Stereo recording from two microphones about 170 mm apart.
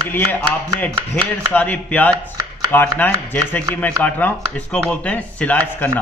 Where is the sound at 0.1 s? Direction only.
10° left (ahead or behind).